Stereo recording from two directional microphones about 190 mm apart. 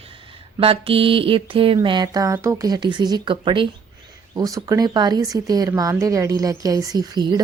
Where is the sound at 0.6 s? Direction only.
30° right (ahead or behind).